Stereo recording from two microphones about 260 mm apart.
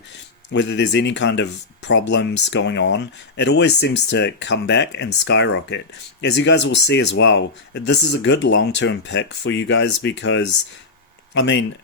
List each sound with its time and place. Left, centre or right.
0.5 s speech: left